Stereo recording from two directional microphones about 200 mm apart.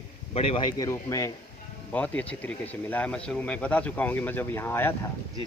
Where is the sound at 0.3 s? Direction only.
30° left (ahead or behind).